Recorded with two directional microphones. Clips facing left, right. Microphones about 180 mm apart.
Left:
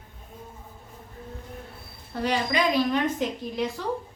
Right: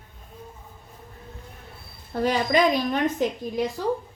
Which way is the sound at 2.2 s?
45° right (ahead or behind).